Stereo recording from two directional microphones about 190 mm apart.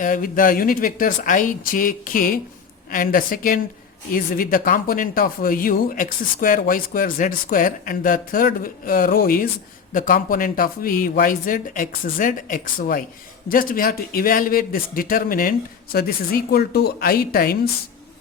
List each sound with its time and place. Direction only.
0.0 s speech: 45° left (ahead or behind)